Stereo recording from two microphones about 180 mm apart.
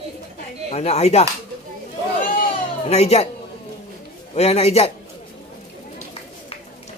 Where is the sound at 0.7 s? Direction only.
35° left (ahead or behind).